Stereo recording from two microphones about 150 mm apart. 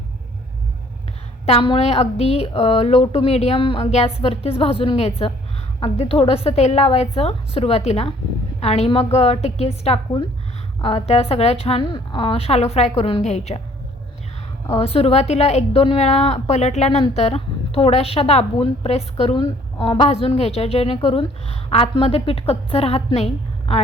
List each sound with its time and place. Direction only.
1.5 s a woman's voice: 40° left (ahead or behind)
14.8 s a woman's voice: 40° left (ahead or behind)